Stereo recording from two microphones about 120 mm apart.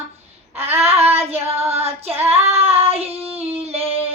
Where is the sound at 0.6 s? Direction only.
60° right (ahead or behind).